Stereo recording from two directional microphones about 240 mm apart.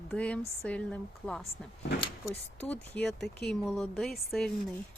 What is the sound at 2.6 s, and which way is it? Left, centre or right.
Speech, centre.